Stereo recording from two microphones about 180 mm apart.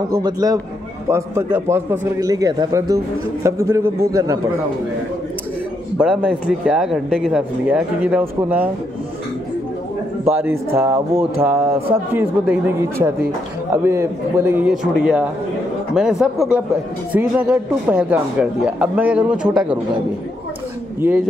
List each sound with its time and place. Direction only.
0.1 s a man's voice: 20° right (ahead or behind)
5.9 s speech: 5° right (ahead or behind)
10.2 s a man's voice: 15° right (ahead or behind)